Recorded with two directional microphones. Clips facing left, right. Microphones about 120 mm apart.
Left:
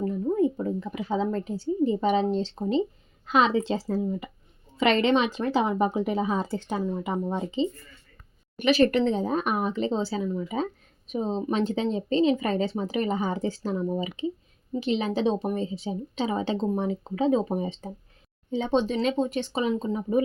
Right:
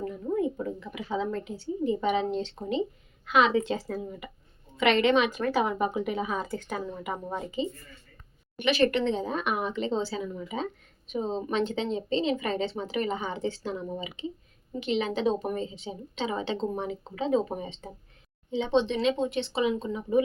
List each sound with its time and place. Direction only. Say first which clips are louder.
0.0 s a woman's voice: left 5 dB; 30° left (ahead or behind)
8.5 s speech: left 3 dB; 40° left (ahead or behind)
14.8 s speech: left 2 dB; 35° left (ahead or behind)